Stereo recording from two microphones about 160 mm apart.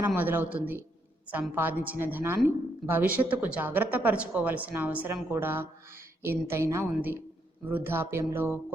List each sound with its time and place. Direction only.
0.0 s speech: 10° right (ahead or behind)